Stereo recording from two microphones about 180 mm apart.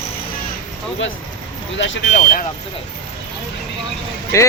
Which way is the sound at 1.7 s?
90° left.